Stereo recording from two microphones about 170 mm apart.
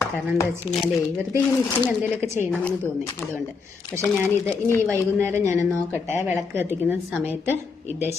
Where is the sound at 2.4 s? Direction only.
10° left (ahead or behind).